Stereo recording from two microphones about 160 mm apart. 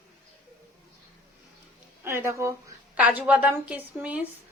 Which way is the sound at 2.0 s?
15° right (ahead or behind).